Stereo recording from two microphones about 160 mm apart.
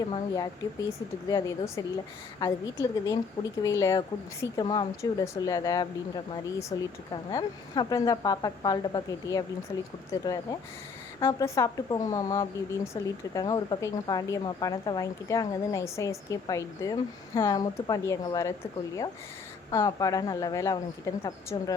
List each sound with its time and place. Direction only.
0.1 s a woman's voice: 25° left (ahead or behind)
19.7 s a woman's voice: 20° left (ahead or behind)